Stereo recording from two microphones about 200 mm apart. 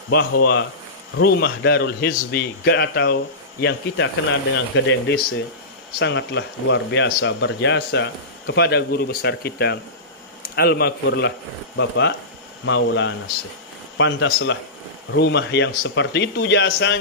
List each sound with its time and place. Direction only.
0.1 s speech: 55° left (ahead or behind)
3.6 s speech: 70° left (ahead or behind)